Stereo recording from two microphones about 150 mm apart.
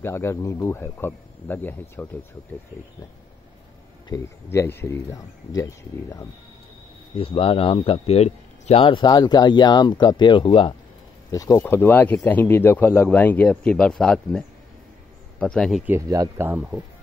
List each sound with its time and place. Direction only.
0.0 s speech: 15° left (ahead or behind)
4.1 s speech: 15° left (ahead or behind)
7.2 s speech: 35° left (ahead or behind)
11.3 s speech: 25° left (ahead or behind); by 15.8 s 5° left (ahead or behind)
15.8 s speech: 15° right (ahead or behind)